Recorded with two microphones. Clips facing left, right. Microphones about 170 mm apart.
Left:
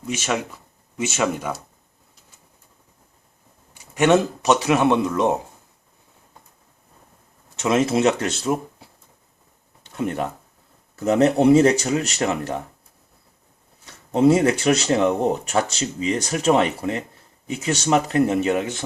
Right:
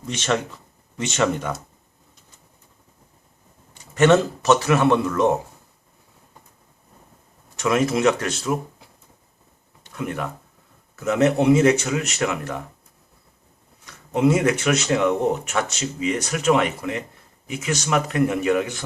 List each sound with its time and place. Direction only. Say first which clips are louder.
0.1 s speech: right 1 dB; 10° left (ahead or behind)
3.8 s a man's voice: right 1 dB; 15° left (ahead or behind)
7.5 s a man's voice: left 1 dB; 25° left (ahead or behind)
9.9 s speech: left 3 dB; 30° left (ahead or behind)
13.8 s a man's voice: left 3 dB; 30° left (ahead or behind)